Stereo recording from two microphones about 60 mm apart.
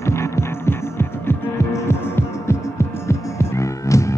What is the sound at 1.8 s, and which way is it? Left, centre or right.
Music, left.